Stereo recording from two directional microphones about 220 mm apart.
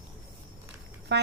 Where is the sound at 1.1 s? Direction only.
50° right (ahead or behind).